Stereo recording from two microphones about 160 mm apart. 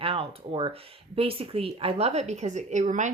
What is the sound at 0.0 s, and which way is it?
Speech, 35° right (ahead or behind).